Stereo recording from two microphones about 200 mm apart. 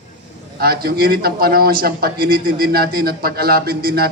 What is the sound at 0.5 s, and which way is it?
A man's voice, 50° right (ahead or behind).